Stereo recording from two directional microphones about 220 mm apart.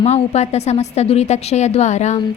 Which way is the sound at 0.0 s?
30° left (ahead or behind).